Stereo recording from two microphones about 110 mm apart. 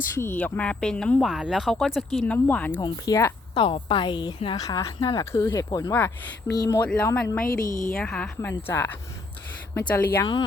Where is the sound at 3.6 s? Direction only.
50° left (ahead or behind).